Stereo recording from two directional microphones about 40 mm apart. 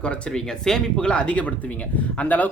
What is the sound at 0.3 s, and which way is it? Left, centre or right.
Speech, centre.